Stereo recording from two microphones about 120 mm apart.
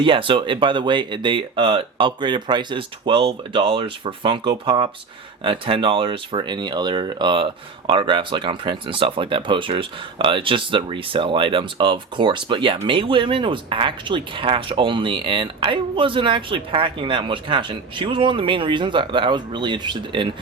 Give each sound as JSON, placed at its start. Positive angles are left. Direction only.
{"t": 0.0, "sound": "speech", "side_deg": -45}